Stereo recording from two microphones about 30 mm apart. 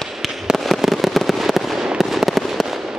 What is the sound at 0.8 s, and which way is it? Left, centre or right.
Fireworks, centre.